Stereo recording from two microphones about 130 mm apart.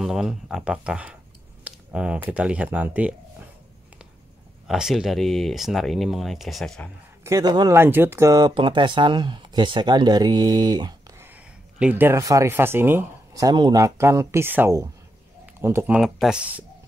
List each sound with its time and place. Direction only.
0.0 s speech: 5° right (ahead or behind)
4.6 s speech: 5° right (ahead or behind)
7.2 s speech: 30° right (ahead or behind)
11.1 s speech: 15° right (ahead or behind)
13.3 s speech: 30° right (ahead or behind)
15.4 s a sound: 20° right (ahead or behind)
15.9 s speech: 5° right (ahead or behind)